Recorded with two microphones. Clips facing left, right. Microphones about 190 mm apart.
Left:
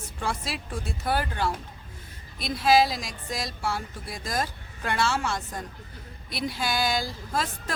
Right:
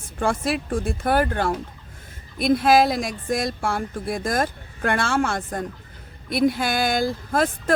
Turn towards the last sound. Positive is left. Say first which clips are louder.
# right 8 dB
turn(degrees=-55)  # may be behind; listen again after turning